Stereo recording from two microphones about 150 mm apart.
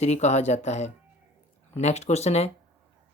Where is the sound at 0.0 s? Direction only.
50° left (ahead or behind).